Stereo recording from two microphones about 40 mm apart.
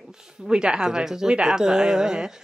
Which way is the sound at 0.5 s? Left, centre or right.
Right.